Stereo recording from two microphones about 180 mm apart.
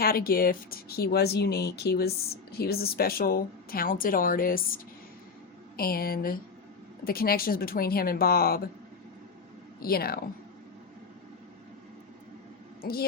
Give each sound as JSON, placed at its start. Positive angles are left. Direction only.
{"t": 0.0, "sound": "speech", "side_deg": 55}
{"t": 9.8, "sound": "speech", "side_deg": 55}
{"t": 12.8, "sound": "speech", "side_deg": 55}